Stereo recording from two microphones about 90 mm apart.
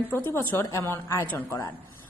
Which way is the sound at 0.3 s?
30° left (ahead or behind).